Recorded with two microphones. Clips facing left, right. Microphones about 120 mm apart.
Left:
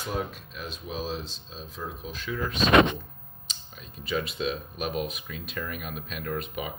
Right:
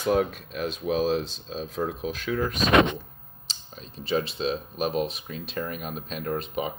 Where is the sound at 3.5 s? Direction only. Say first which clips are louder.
Right 3 dB; 30° right (ahead or behind).